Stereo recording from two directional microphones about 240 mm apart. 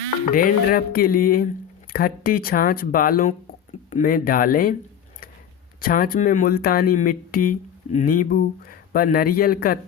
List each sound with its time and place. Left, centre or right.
0.3 s speech: left
5.8 s speech: left